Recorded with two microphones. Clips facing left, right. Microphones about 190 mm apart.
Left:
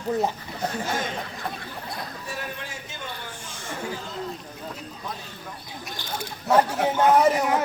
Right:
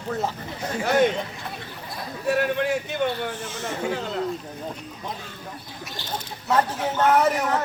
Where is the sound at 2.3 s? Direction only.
65° right (ahead or behind).